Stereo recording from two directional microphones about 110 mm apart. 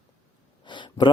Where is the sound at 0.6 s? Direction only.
45° left (ahead or behind).